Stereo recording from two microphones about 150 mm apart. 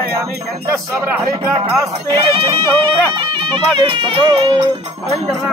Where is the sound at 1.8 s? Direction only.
35° right (ahead or behind).